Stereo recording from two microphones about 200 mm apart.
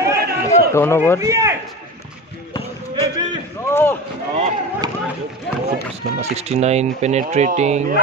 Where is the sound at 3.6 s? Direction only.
10° left (ahead or behind).